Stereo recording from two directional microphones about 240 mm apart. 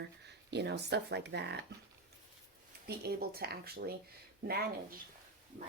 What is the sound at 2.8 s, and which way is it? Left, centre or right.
Speech, right.